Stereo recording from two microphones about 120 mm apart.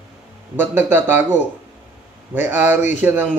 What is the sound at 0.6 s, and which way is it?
A man's voice, 15° right (ahead or behind).